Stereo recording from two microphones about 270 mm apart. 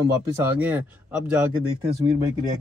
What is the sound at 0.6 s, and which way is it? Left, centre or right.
Speech, centre.